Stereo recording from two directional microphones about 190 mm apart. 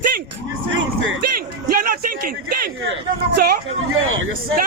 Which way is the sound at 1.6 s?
50° right (ahead or behind).